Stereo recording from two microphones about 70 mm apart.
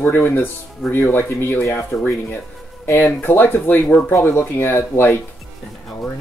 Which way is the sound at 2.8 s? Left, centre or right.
Left.